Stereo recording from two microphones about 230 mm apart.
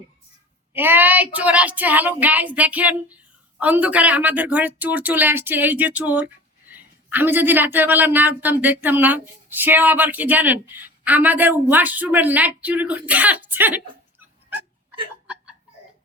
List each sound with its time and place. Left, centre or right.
0.7 s speech: centre